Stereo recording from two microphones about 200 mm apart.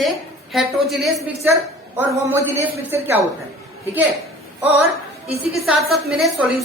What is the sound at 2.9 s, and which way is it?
Speech, 10° right (ahead or behind).